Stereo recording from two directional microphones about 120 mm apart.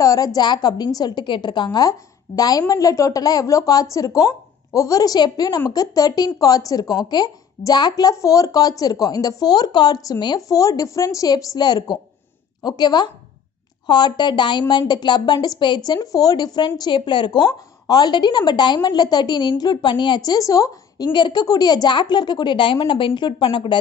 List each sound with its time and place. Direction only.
0.0 s a woman's voice: 30° left (ahead or behind); by 23.8 s 45° left (ahead or behind)